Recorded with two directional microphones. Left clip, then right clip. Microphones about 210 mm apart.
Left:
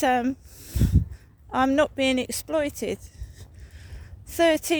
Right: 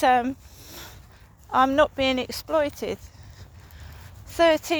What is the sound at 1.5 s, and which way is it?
Speech, 55° left (ahead or behind).